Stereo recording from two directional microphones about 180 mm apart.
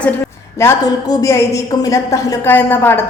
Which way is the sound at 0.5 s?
15° left (ahead or behind).